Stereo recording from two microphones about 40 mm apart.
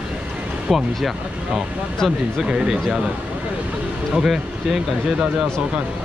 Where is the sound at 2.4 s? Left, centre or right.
Centre.